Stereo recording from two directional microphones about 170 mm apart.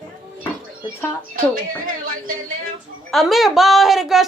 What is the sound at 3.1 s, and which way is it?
A woman's voice, centre (ahead or behind).